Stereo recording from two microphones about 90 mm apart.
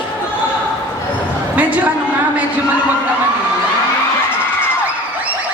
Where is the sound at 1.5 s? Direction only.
15° right (ahead or behind).